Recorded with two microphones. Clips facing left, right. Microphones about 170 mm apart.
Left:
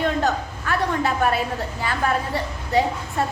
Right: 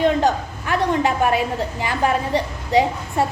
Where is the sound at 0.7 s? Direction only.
15° right (ahead or behind).